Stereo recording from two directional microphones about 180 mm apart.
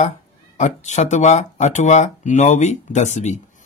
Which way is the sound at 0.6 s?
40° left (ahead or behind).